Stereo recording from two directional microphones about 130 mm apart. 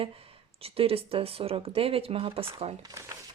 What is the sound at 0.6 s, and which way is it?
Speech, 45° right (ahead or behind).